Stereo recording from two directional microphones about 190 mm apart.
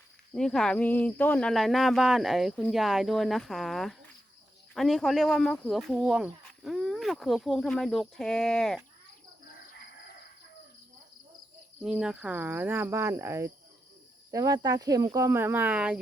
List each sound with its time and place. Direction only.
0.3 s speech: 5° left (ahead or behind)
11.8 s speech: 5° right (ahead or behind)